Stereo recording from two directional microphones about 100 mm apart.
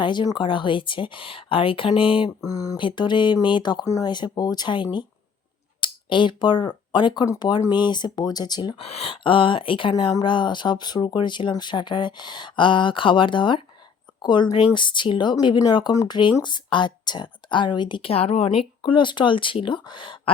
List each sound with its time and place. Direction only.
0.0 s a woman's voice: 50° left (ahead or behind)
2.4 s speech: 35° left (ahead or behind)
2.7 s speech: 50° left (ahead or behind)
3.8 s speech: 35° left (ahead or behind)
4.1 s speech: 45° left (ahead or behind)
8.8 s a woman's voice: 85° left; by 18.1 s 55° left (ahead or behind)
18.1 s speech: 80° left
18.8 s a woman's voice: 55° left (ahead or behind)